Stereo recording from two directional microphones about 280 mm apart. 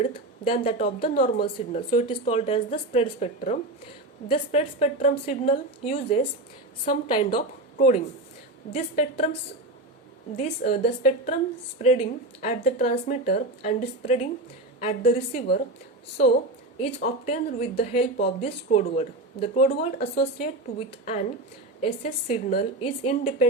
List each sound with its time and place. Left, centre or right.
0.0 s a sound: centre
0.6 s speech: left
10.3 s speech: left
16.8 s speech: left
19.7 s speech: left